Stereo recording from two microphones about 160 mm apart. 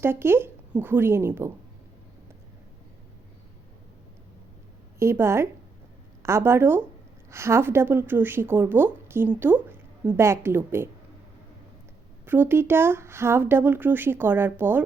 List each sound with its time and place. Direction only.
0.0 s a woman's voice: 15° right (ahead or behind)
4.9 s a woman's voice: 15° right (ahead or behind)
12.2 s a woman's voice: 15° right (ahead or behind)